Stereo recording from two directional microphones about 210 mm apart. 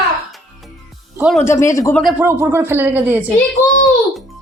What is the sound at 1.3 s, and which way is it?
Speech, 15° left (ahead or behind).